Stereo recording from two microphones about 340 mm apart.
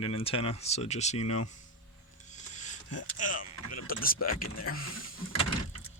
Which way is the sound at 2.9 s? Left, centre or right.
Left.